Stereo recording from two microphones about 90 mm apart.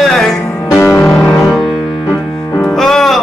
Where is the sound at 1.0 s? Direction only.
5° left (ahead or behind).